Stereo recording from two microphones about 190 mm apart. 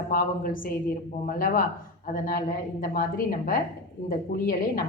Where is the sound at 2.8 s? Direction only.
45° left (ahead or behind).